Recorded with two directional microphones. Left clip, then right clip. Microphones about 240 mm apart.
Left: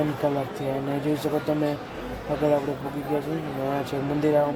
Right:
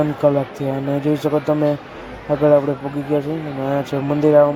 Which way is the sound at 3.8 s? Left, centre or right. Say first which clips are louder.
Right 10 dB; centre.